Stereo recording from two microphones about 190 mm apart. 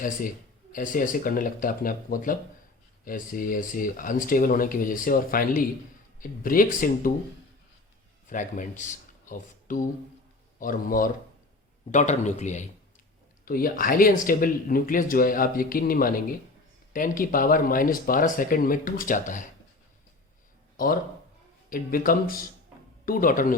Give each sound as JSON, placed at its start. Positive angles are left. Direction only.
{"t": 0.7, "sound": "speech", "side_deg": 45}
{"t": 8.3, "sound": "a man's voice", "side_deg": 40}
{"t": 13.4, "sound": "speech", "side_deg": 50}
{"t": 20.7, "sound": "speech", "side_deg": 50}